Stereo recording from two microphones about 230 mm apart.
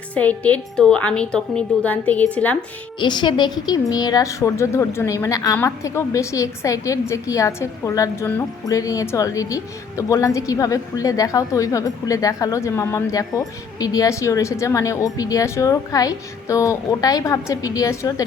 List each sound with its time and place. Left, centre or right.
0.1 s a woman's voice: centre
3.0 s a woman's voice: centre